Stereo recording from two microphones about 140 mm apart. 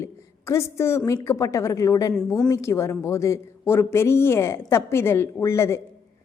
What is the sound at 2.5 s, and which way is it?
A woman's voice, 20° left (ahead or behind).